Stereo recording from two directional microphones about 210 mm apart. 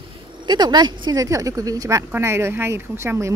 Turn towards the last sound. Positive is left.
turn(degrees=-15)  # may be behind; listen again after turning